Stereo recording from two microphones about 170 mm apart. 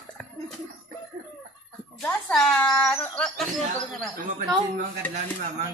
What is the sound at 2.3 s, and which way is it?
Cat, centre (ahead or behind).